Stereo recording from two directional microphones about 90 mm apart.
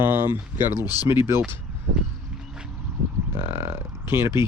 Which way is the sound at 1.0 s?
30° right (ahead or behind).